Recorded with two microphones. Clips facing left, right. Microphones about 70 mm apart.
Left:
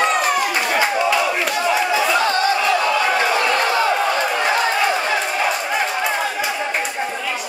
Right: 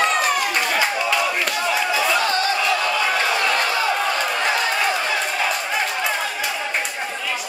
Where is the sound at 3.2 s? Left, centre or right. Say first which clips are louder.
Left 3 dB; centre.